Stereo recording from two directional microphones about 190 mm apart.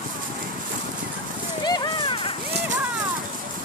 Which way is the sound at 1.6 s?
25° left (ahead or behind).